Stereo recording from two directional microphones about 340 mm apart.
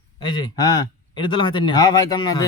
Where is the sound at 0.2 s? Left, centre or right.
Centre.